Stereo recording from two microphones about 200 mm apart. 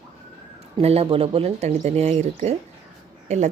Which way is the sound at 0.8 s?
30° right (ahead or behind).